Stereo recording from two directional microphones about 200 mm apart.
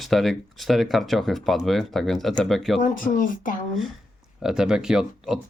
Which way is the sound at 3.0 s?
45° left (ahead or behind).